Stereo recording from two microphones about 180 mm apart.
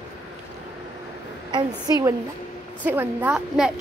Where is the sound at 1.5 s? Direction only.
20° right (ahead or behind).